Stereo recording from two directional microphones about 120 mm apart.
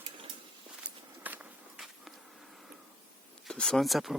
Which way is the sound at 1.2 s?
15° right (ahead or behind).